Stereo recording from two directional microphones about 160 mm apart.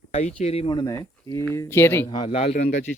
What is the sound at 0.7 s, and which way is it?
Speech, 25° left (ahead or behind).